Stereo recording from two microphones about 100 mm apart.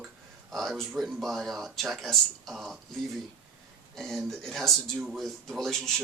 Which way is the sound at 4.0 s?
5° left (ahead or behind).